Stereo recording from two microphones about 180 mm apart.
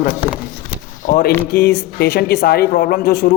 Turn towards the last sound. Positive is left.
turn(degrees=55)  # may be behind; listen again after turning